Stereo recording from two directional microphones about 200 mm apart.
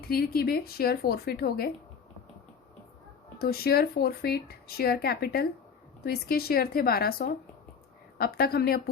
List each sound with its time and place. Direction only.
0.1 s speech: 50° left (ahead or behind)
3.3 s speech: 50° left (ahead or behind)